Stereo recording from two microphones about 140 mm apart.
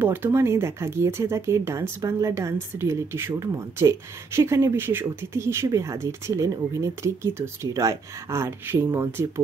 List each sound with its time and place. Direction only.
0.0 s speech: 15° right (ahead or behind)